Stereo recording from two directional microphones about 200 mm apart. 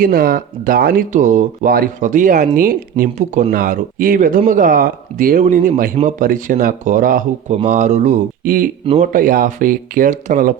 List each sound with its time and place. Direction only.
0.0 s speech: 45° right (ahead or behind)